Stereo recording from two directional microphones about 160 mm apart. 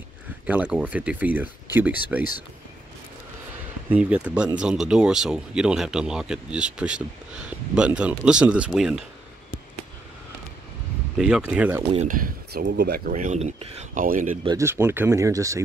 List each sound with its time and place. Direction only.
0.5 s speech: 5° right (ahead or behind)
3.9 s speech: 10° right (ahead or behind)
11.1 s speech: 5° right (ahead or behind)
12.1 s speech: 65° right (ahead or behind); by 13.1 s 80° right
13.1 s speech: 50° right (ahead or behind)
14.0 s speech: 55° right (ahead or behind)
14.6 s speech: 15° right (ahead or behind)